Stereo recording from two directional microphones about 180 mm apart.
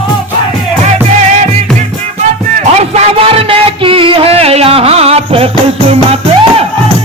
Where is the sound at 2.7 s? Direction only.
35° right (ahead or behind).